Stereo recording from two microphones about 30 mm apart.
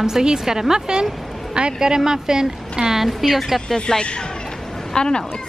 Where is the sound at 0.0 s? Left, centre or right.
Right.